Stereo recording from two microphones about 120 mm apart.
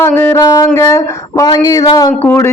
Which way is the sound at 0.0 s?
20° left (ahead or behind).